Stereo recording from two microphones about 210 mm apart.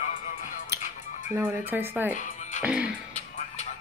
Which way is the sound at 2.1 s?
35° left (ahead or behind).